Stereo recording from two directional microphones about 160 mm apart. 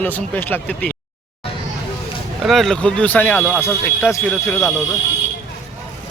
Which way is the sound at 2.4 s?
Centre (ahead or behind).